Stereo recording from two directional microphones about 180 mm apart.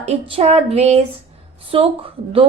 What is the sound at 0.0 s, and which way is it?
Speech, 35° right (ahead or behind).